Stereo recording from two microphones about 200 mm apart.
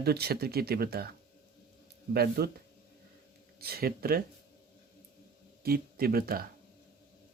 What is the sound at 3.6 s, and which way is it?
Speech, 50° right (ahead or behind).